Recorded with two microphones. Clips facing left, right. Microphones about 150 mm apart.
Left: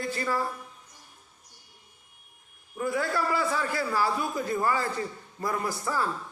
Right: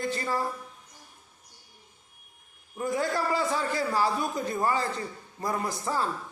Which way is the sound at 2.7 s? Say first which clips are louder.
Even; 20° right (ahead or behind).